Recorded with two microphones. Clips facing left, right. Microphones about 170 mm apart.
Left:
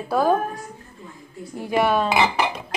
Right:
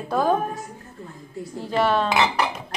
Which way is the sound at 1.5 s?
15° left (ahead or behind).